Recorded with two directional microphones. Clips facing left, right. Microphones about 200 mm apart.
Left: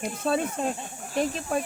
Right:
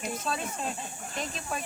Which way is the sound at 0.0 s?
55° left (ahead or behind).